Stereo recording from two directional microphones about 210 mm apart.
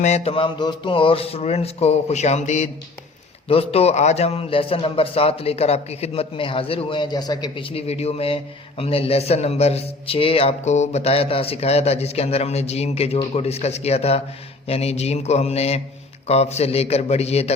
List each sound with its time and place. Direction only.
0.0 s a man's voice: 30° left (ahead or behind)